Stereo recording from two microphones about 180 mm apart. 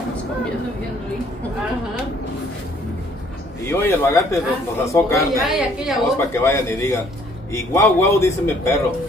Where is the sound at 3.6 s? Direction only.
15° left (ahead or behind).